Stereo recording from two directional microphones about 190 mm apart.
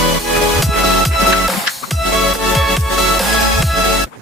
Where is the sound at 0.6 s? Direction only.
Centre (ahead or behind).